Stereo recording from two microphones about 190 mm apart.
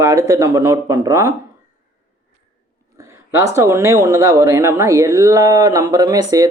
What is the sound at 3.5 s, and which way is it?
Speech, 15° right (ahead or behind).